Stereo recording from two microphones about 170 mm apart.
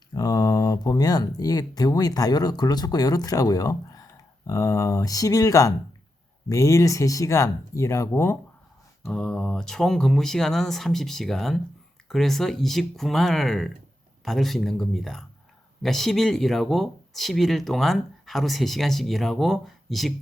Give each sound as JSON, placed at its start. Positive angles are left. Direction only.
{"t": 0.1, "sound": "speech", "side_deg": 20}
{"t": 9.0, "sound": "speech", "side_deg": 5}